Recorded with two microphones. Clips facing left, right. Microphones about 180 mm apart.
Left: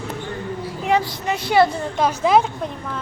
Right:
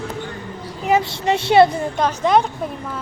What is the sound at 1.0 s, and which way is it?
Speech, 30° right (ahead or behind).